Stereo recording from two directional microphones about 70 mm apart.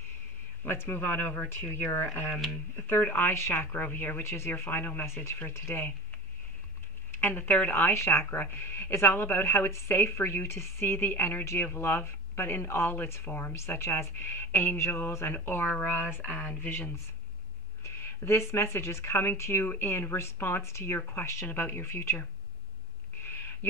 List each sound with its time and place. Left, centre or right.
0.7 s speech: left
2.2 s speech: centre
2.7 s speech: left
7.1 s speech: left
17.8 s speech: left
23.2 s owl: left